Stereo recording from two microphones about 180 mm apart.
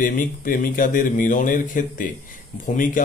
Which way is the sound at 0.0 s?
50° left (ahead or behind).